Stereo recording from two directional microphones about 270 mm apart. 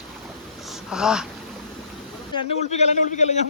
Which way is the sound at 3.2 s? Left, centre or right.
Left.